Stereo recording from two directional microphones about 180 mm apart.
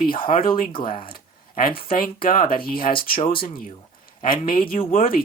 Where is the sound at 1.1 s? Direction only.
55° left (ahead or behind).